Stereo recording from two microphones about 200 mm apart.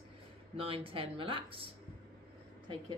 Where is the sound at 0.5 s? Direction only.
25° right (ahead or behind).